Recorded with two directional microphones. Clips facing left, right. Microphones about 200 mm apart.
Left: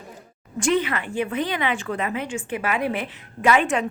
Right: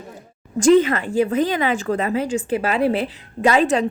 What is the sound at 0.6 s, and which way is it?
A woman's voice, 45° right (ahead or behind).